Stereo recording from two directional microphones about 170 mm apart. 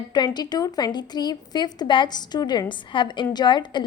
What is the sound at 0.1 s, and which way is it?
A woman's voice, 25° left (ahead or behind).